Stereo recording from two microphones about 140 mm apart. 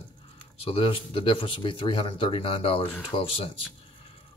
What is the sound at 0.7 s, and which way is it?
Speech, 40° left (ahead or behind).